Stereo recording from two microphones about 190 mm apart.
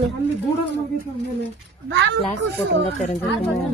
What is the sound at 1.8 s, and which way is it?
Speech, 70° right (ahead or behind).